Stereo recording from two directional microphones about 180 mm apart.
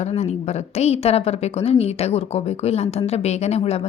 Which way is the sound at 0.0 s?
40° left (ahead or behind).